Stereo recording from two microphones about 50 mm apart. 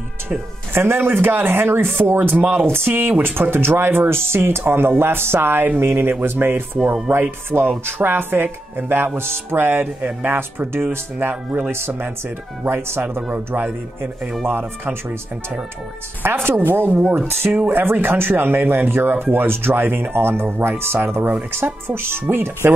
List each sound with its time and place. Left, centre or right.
0.7 s speech: right
12.6 s speech: right
14.4 s speech: right
16.4 s speech: right